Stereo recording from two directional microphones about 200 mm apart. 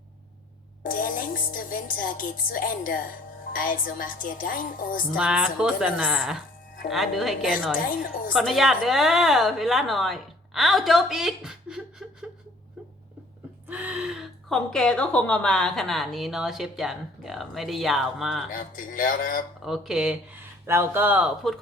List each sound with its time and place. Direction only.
0.9 s a woman's voice: 45° left (ahead or behind)
5.1 s speech: 5° right (ahead or behind)
7.8 s a woman's voice: 45° left (ahead or behind)
8.3 s a woman's voice: centre (ahead or behind)
13.7 s speech: 10° right (ahead or behind)
18.5 s a woman's voice: 45° left (ahead or behind)
19.6 s speech: centre (ahead or behind)